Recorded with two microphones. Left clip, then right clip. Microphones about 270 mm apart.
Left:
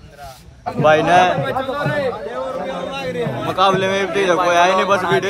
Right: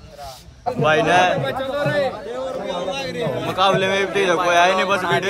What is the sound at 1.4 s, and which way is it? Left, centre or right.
Speech, centre.